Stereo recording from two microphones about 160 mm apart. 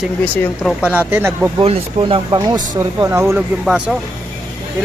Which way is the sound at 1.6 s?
40° right (ahead or behind).